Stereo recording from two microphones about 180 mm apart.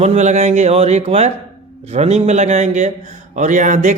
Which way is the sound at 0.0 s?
40° right (ahead or behind).